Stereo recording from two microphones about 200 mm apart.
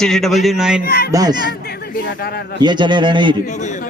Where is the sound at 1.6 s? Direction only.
50° left (ahead or behind).